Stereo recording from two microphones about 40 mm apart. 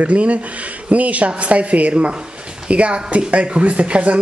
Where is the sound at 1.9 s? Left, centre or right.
Right.